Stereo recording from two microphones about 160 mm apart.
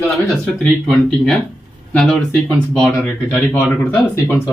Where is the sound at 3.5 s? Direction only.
10° left (ahead or behind).